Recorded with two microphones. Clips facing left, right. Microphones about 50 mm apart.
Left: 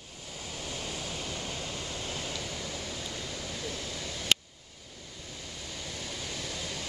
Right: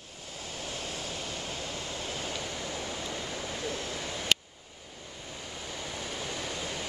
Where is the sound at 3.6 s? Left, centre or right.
Centre.